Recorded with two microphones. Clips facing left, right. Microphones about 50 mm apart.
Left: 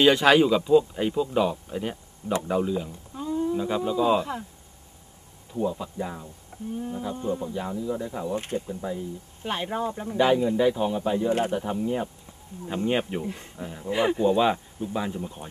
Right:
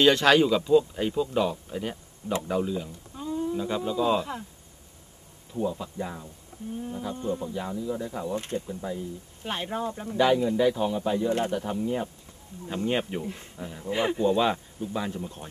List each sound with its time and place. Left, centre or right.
0.0 s speech: centre
5.5 s speech: centre
11.3 s speech: left
11.6 s speech: centre